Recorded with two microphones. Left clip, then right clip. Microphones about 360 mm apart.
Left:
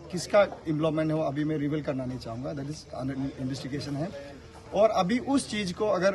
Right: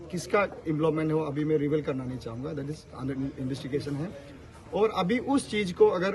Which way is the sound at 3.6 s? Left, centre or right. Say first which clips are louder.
Right 3 dB; centre.